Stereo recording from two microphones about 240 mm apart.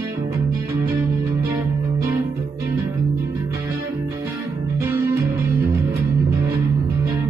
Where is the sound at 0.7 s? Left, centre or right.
Centre.